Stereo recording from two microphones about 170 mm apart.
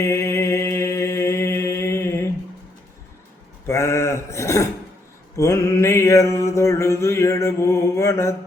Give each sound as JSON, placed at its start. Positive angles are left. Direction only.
{"t": 0.0, "sound": "mantra", "side_deg": 15}
{"t": 3.7, "sound": "a sound", "side_deg": 15}
{"t": 5.4, "sound": "mantra", "side_deg": 15}